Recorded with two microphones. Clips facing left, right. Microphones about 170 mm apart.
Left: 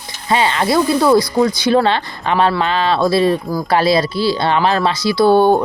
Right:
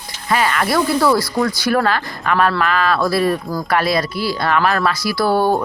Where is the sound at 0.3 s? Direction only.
25° left (ahead or behind).